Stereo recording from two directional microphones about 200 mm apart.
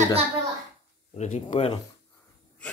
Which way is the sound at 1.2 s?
35° left (ahead or behind).